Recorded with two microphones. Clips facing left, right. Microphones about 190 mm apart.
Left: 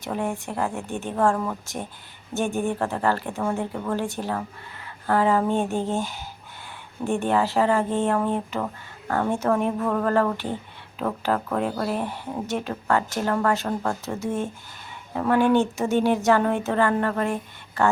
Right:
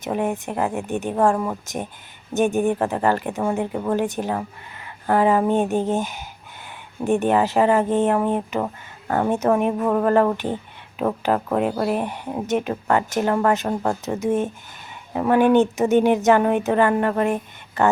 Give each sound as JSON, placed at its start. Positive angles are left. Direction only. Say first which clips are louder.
{"t": 0.0, "sound": "speech", "louder": "right 4 dB", "side_deg": -20}